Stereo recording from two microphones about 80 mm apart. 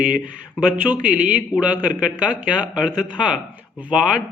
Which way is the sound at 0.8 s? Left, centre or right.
Centre.